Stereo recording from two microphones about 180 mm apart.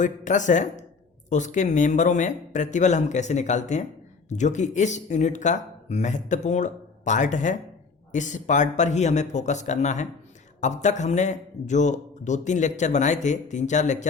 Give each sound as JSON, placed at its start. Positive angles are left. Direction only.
{"t": 0.0, "sound": "speech", "side_deg": 45}